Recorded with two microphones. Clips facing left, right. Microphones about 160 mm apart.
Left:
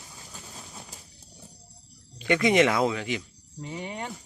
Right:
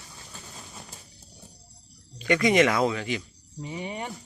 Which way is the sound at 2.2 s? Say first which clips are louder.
Even; 25° left (ahead or behind).